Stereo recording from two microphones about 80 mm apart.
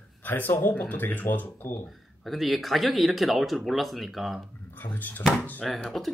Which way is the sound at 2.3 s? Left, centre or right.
Centre.